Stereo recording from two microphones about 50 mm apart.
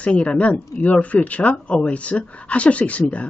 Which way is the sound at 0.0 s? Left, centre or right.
Left.